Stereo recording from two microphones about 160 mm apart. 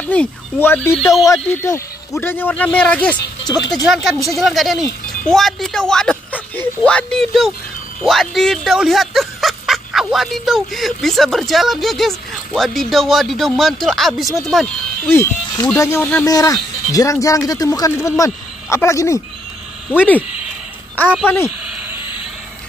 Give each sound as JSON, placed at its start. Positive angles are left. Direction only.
{"t": 0.0, "sound": "speech", "side_deg": 10}
{"t": 3.2, "sound": "speech", "side_deg": 25}
{"t": 3.8, "sound": "speech", "side_deg": 0}
{"t": 15.0, "sound": "speech", "side_deg": 15}
{"t": 21.0, "sound": "a woman's voice", "side_deg": 10}
{"t": 21.7, "sound": "frog", "side_deg": -10}